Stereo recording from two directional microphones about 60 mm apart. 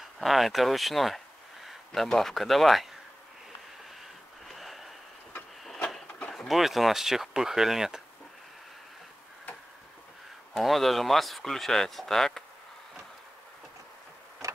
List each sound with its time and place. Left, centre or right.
0.0 s a sound: centre
1.9 s speech: centre
4.5 s gasp: centre
6.3 s speech: centre
10.5 s speech: centre
14.4 s vehicle: right